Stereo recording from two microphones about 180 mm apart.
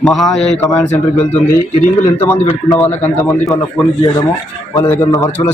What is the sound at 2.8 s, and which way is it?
Speech, 10° left (ahead or behind).